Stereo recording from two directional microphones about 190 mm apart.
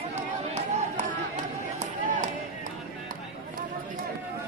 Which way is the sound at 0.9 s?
40° right (ahead or behind).